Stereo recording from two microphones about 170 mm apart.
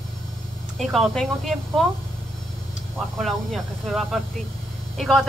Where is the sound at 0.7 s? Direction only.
Centre (ahead or behind).